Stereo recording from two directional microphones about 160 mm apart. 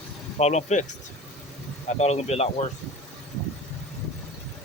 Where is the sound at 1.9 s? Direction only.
45° left (ahead or behind).